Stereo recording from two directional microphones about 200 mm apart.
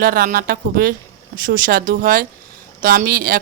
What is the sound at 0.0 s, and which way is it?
Speech, 45° right (ahead or behind).